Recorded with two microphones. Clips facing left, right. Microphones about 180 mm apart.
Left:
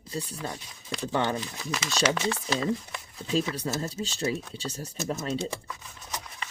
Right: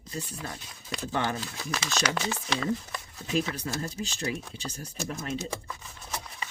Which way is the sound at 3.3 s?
30° left (ahead or behind).